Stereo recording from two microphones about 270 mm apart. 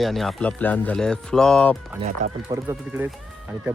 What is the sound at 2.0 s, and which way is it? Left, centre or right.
Speech, right.